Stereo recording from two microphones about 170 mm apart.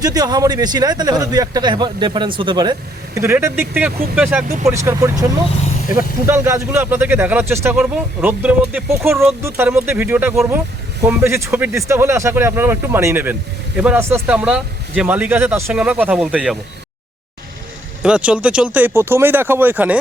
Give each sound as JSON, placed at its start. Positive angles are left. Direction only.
{"t": 0.0, "sound": "a man's voice", "side_deg": -25}
{"t": 3.2, "sound": "speech", "side_deg": -15}
{"t": 4.6, "sound": "speech", "side_deg": -15}
{"t": 18.0, "sound": "speech", "side_deg": -5}